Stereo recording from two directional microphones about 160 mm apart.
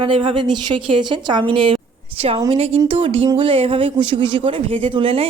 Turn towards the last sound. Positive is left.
turn(degrees=-35)  # may be behind; listen again after turning